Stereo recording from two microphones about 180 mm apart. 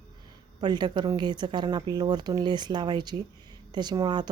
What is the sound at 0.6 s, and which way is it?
Speech, 25° right (ahead or behind).